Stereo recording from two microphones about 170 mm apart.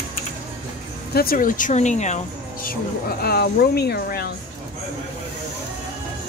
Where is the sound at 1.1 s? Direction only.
60° left (ahead or behind).